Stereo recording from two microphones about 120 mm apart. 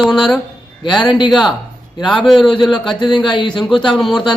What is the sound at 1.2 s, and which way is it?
Speech, centre (ahead or behind).